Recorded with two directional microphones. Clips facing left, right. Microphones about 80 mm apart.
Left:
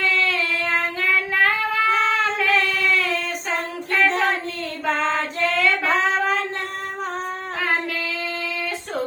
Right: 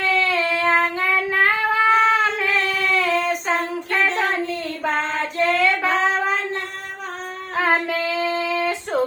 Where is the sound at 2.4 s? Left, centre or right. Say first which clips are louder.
Left 1 dB; right.